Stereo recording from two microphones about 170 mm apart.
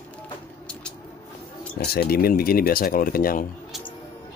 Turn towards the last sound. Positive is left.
turn(degrees=60)  # may be behind; listen again after turning